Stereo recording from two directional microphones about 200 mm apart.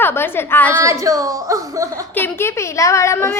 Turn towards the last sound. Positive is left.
turn(degrees=15)  # may be behind; listen again after turning